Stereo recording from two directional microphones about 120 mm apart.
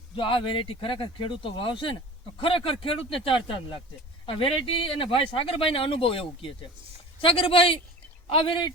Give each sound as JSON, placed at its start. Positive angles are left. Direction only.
{"t": 0.2, "sound": "speech", "side_deg": 45}